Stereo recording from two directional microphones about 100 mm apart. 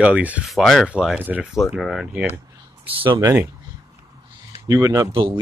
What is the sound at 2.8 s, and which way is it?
Speech, 60° right (ahead or behind).